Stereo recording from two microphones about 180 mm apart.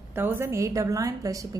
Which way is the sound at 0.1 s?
10° right (ahead or behind).